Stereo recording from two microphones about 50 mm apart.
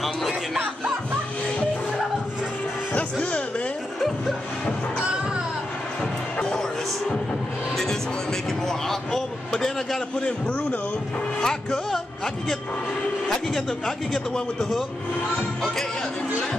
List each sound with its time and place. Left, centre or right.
0.0 s music: centre
2.9 s music: left
6.3 s music: centre
7.7 s a man's voice: centre
11.4 s a man's voice: centre
13.3 s a man's voice: centre